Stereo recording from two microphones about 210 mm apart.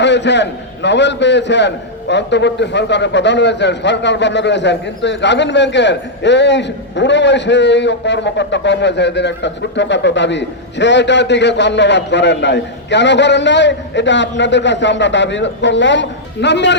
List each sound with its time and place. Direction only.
0.0 s a man's voice: 55° left (ahead or behind)